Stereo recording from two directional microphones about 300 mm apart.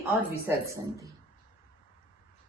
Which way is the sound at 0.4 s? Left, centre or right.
Centre.